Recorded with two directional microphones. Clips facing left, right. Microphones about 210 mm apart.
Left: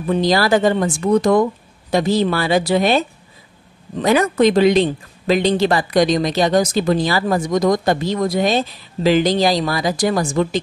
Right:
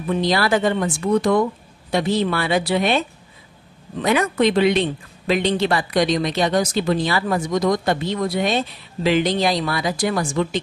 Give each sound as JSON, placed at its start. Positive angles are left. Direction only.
{"t": 0.1, "sound": "speech", "side_deg": 40}